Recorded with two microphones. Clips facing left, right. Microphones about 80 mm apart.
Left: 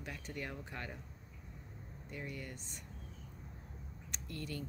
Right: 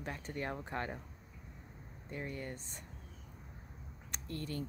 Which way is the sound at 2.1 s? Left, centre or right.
Right.